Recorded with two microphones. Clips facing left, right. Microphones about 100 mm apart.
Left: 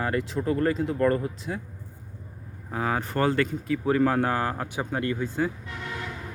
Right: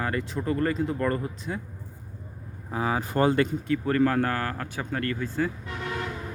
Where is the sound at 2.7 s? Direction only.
5° right (ahead or behind).